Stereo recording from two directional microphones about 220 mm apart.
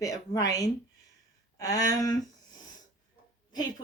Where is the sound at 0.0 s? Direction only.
15° left (ahead or behind).